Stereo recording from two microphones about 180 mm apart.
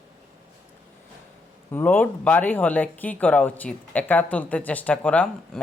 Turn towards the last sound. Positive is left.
turn(degrees=5)  # may be behind; listen again after turning